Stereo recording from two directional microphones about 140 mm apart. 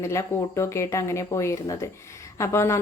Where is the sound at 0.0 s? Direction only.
20° left (ahead or behind).